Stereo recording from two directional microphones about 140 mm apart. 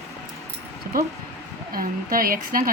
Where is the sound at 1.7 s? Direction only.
90° right.